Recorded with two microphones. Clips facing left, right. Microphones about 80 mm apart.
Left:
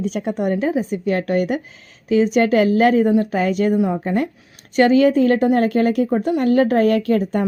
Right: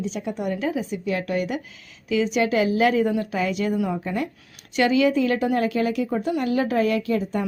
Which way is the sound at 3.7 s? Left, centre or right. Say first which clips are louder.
Left 6 dB; left.